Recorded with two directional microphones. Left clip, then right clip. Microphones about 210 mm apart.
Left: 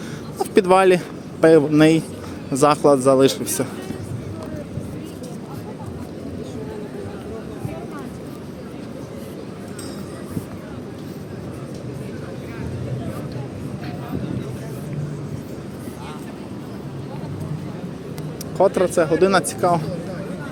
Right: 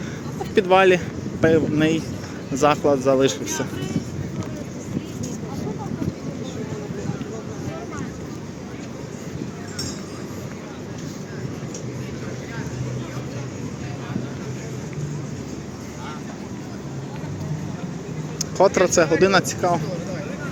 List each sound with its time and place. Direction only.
0.5 s a man's voice: 25° left (ahead or behind)
18.5 s speech: centre (ahead or behind)